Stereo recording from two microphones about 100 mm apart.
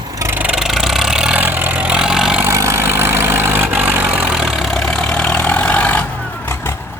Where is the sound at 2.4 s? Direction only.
30° right (ahead or behind); by 4.6 s 5° right (ahead or behind).